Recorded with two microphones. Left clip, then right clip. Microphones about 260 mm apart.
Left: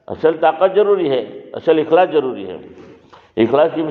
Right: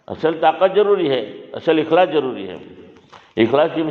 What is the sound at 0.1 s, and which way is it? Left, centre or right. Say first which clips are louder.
A man's voice: left 2 dB; right.